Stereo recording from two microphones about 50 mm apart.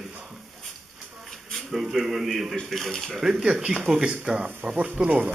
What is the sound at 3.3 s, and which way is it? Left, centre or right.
Speech, centre.